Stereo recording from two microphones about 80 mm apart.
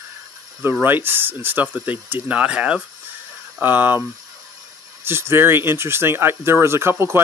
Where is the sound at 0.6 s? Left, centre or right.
Right.